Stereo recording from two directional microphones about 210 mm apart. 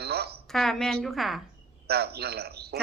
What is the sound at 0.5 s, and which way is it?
Speech, centre (ahead or behind).